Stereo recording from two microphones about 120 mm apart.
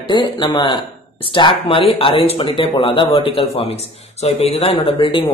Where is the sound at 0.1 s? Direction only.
40° left (ahead or behind).